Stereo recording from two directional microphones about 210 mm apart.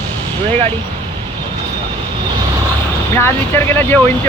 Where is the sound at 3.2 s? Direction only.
10° left (ahead or behind).